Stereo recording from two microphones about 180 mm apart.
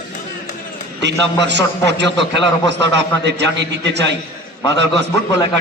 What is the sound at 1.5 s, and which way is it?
A man's voice, 75° right (ahead or behind).